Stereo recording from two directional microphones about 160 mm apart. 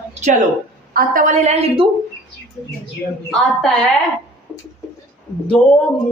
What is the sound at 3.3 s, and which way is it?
Speech, centre (ahead or behind).